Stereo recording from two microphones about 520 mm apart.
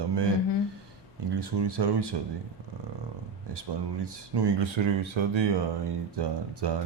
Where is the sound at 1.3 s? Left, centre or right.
Right.